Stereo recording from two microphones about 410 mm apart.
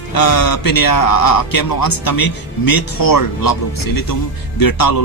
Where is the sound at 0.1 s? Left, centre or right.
Left.